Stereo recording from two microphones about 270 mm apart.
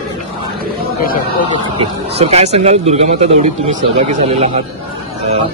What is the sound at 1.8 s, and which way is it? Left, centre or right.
Speech, right.